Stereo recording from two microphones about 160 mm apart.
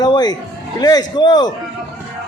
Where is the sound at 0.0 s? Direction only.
25° left (ahead or behind).